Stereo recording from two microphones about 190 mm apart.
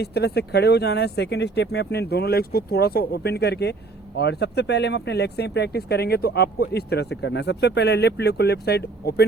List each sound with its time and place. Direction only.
0.0 s speech: 60° left (ahead or behind)